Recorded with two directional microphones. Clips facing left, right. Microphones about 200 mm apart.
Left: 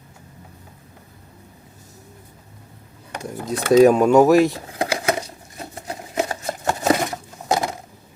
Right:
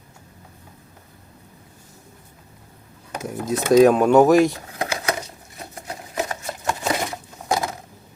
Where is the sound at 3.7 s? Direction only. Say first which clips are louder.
Left 1 dB; 5° left (ahead or behind).